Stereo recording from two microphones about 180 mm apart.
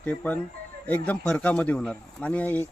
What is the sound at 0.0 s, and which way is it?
Speech, 10° left (ahead or behind).